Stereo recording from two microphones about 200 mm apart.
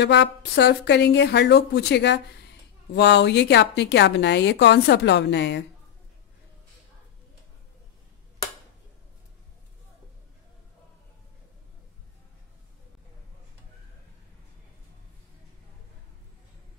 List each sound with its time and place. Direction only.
0.0 s a woman's voice: 60° left (ahead or behind)